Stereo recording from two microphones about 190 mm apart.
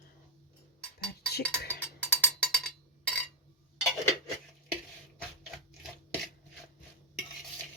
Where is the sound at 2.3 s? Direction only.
5° left (ahead or behind).